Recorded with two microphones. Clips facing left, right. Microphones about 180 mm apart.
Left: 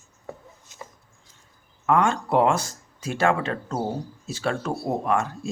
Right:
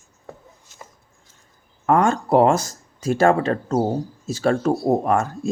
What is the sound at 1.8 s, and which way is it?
Speech, 40° right (ahead or behind).